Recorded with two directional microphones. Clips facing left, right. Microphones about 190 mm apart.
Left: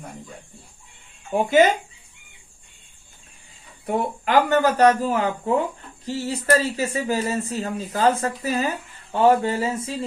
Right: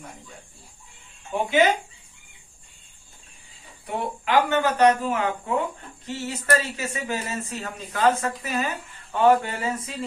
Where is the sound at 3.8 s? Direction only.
45° left (ahead or behind).